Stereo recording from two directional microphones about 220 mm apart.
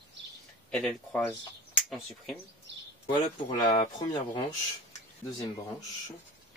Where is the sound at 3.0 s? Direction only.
25° left (ahead or behind).